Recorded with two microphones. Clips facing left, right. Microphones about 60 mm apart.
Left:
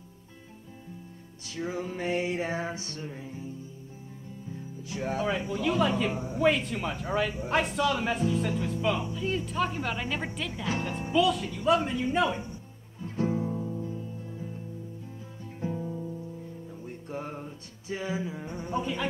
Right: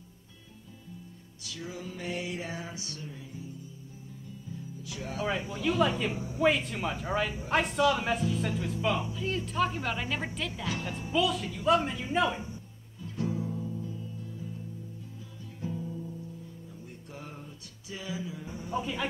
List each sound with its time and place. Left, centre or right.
1.5 s music: left
4.8 s speech: left
5.2 s speech: centre
13.0 s music: left
15.6 s music: left
18.4 s insect: left
18.7 s insect: centre